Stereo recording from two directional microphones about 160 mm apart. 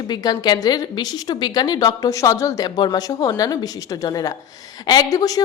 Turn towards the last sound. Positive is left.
turn(degrees=20)  # may be behind; listen again after turning